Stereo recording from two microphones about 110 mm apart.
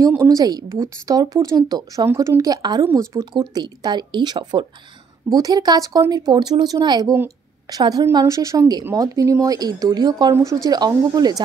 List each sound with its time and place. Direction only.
0.1 s a woman's voice: 30° right (ahead or behind)
2.8 s a woman's voice: 30° right (ahead or behind)